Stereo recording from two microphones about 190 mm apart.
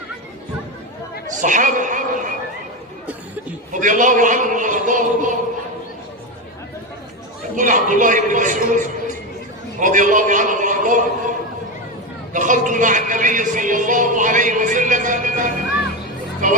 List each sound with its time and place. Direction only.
1.4 s a man's voice: 45° right (ahead or behind)
3.7 s a man's voice: 40° right (ahead or behind)
7.5 s a man's voice: 45° right (ahead or behind)
12.3 s a man's voice: 40° right (ahead or behind)